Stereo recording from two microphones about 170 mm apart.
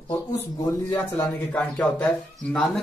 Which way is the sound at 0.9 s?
10° left (ahead or behind).